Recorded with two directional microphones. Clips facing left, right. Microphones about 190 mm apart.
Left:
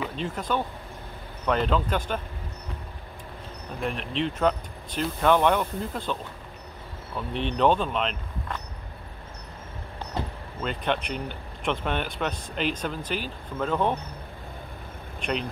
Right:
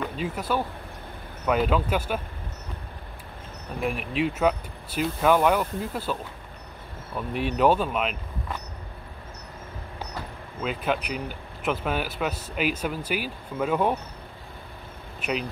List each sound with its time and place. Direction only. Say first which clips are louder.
0.1 s speech: right 1 dB; 5° right (ahead or behind)
3.8 s speech: right 2 dB; 10° right (ahead or behind)
7.2 s speech: right 1 dB; 10° right (ahead or behind)
10.2 s vehicle: left 7 dB; 20° left (ahead or behind)
10.6 s speech: right 1 dB; 5° right (ahead or behind)
15.1 s speech: even; 5° right (ahead or behind)